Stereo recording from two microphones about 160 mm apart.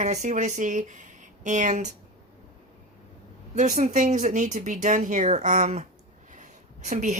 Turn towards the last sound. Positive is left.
turn(degrees=-50)  # may be behind; listen again after turning